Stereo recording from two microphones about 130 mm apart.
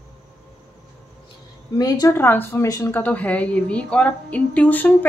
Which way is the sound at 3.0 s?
10° left (ahead or behind).